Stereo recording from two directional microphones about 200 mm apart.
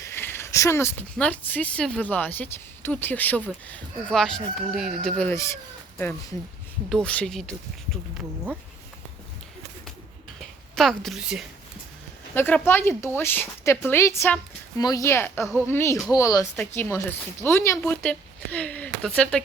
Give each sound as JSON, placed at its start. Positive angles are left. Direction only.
{"t": 0.0, "sound": "speech", "side_deg": 10}
{"t": 6.9, "sound": "speech", "side_deg": 5}
{"t": 10.8, "sound": "speech", "side_deg": 0}
{"t": 12.3, "sound": "speech", "side_deg": 10}